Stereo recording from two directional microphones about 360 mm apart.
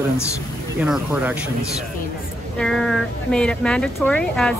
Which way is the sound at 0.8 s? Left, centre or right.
Centre.